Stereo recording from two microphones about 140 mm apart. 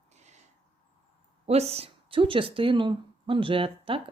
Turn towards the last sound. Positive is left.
turn(degrees=-40)  # may be behind; listen again after turning